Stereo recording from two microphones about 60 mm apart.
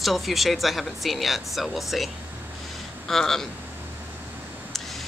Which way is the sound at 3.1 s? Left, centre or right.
Centre.